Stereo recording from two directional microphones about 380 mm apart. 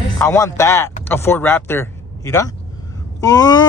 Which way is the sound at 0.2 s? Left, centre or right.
Centre.